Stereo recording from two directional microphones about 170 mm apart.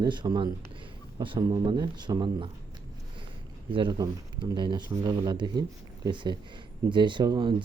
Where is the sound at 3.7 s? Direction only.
30° right (ahead or behind).